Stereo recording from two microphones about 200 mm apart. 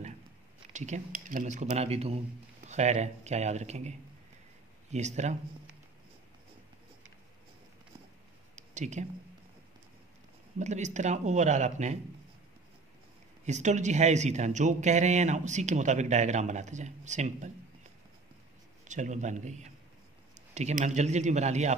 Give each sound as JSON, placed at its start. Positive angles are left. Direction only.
{"t": 0.7, "sound": "a man's voice", "side_deg": -35}
{"t": 4.9, "sound": "a man's voice", "side_deg": -35}
{"t": 8.5, "sound": "a sound", "side_deg": -35}
{"t": 10.6, "sound": "a man's voice", "side_deg": -35}
{"t": 13.5, "sound": "a man's voice", "side_deg": -35}
{"t": 18.9, "sound": "a man's voice", "side_deg": -35}